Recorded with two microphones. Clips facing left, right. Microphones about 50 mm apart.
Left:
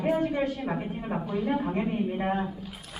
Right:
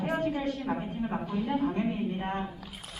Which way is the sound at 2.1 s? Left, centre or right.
Left.